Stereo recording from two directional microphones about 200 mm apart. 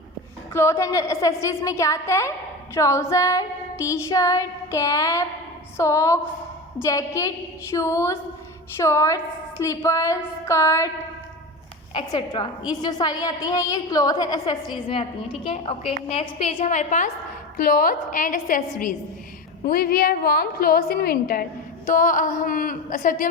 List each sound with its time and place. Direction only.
0.5 s female singing: 15° left (ahead or behind)
11.9 s a woman's voice: 20° left (ahead or behind); by 23.3 s 45° left (ahead or behind)